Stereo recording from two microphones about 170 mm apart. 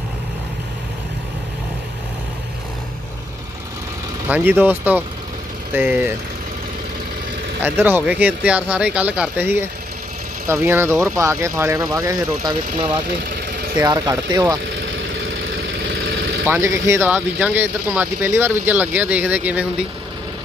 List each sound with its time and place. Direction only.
4.3 s speech: 10° right (ahead or behind)
7.6 s speech: 10° right (ahead or behind)
13.7 s speech: 20° right (ahead or behind)
16.4 s speech: 15° right (ahead or behind)